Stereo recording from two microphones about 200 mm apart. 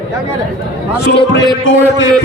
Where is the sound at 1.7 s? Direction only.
70° left (ahead or behind).